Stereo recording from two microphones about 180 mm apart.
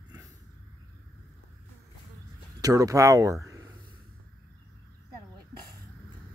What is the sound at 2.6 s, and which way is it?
Speech, 20° right (ahead or behind).